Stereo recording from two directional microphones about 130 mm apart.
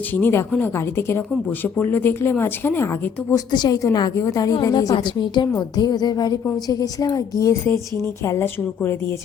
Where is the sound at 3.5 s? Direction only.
30° left (ahead or behind).